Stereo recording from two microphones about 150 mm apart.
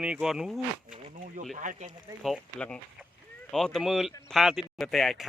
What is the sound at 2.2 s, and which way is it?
Speech, 5° left (ahead or behind).